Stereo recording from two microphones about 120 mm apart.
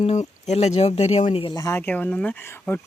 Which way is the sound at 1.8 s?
15° left (ahead or behind).